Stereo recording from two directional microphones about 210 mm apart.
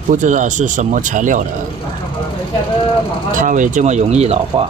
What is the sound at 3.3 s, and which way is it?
Speech, 40° right (ahead or behind).